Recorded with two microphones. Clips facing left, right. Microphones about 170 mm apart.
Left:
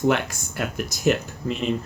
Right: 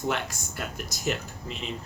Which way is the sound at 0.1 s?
65° left (ahead or behind).